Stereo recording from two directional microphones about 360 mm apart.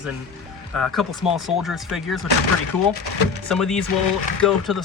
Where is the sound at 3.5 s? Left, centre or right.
Centre.